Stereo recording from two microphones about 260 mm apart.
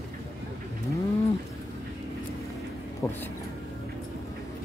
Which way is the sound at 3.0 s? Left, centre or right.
Centre.